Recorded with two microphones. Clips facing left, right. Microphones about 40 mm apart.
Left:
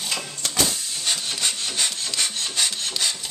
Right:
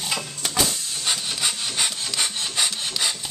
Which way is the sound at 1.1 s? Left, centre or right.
Centre.